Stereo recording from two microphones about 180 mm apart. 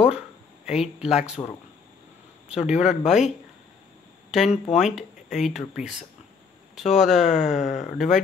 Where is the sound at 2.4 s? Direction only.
5° right (ahead or behind).